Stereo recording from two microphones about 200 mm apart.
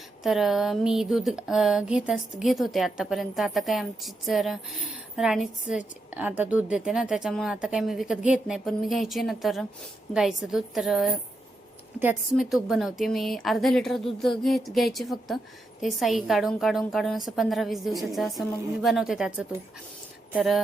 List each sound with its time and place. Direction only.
0.2 s a woman's voice: centre (ahead or behind)